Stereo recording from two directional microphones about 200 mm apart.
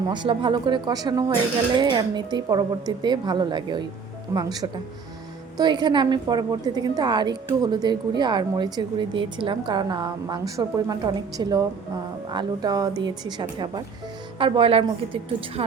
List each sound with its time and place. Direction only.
0.1 s a woman's voice: 25° right (ahead or behind)